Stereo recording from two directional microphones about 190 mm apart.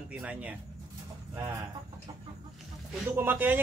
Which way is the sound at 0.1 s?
5° right (ahead or behind).